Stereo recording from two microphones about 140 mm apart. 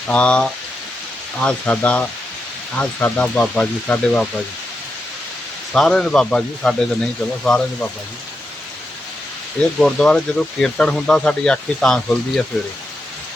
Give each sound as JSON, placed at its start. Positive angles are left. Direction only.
{"t": 0.1, "sound": "speech", "side_deg": 10}
{"t": 5.7, "sound": "speech", "side_deg": 5}
{"t": 9.7, "sound": "speech", "side_deg": 5}